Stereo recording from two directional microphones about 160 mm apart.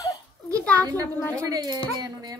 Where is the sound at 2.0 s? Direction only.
25° right (ahead or behind).